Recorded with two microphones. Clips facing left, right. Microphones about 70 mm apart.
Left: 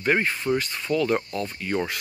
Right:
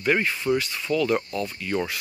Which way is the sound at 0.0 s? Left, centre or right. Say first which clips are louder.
Even; left.